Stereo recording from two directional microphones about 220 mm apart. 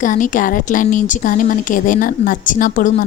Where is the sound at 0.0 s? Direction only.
35° left (ahead or behind).